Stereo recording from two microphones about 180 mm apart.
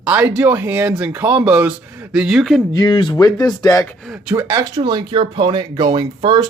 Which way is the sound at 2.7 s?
25° left (ahead or behind).